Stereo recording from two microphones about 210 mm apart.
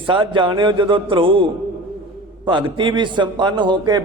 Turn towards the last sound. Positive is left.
turn(degrees=-20)  # may be behind; listen again after turning